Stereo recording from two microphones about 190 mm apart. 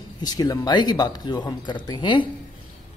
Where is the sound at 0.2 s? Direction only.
20° left (ahead or behind).